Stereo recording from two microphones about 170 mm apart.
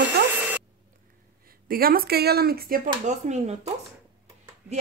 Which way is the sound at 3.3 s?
40° right (ahead or behind).